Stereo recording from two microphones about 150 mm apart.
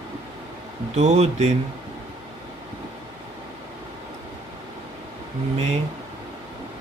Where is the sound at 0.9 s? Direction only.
50° right (ahead or behind).